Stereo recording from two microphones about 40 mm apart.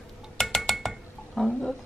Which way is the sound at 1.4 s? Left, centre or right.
Centre.